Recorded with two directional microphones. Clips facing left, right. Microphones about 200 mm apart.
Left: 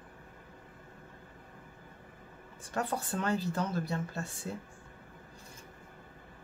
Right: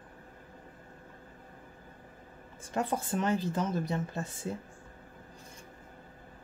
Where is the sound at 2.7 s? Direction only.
20° right (ahead or behind).